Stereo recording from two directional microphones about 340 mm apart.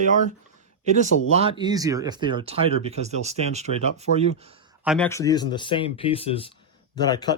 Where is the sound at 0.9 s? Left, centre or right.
Right.